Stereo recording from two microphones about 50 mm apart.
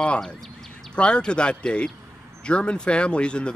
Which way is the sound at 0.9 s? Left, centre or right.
Centre.